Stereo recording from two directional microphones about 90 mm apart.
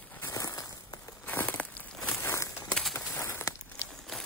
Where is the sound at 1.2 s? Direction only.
20° left (ahead or behind).